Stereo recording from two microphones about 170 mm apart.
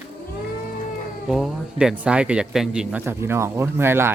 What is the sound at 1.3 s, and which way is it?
Speech, centre (ahead or behind).